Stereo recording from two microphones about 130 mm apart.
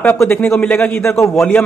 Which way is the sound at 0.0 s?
10° left (ahead or behind).